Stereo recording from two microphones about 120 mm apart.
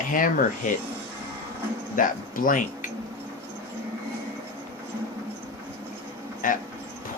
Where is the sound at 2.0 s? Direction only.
90° left.